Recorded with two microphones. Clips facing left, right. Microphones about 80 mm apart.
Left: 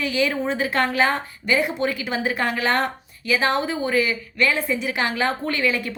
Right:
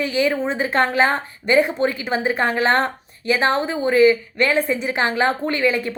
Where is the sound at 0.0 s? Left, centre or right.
Right.